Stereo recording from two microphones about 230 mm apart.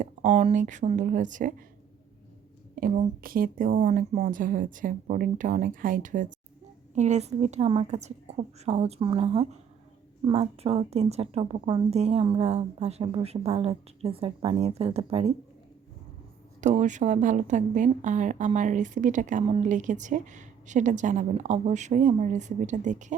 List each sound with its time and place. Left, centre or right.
0.0 s a woman's voice: right
2.7 s a woman's voice: right
16.6 s a woman's voice: right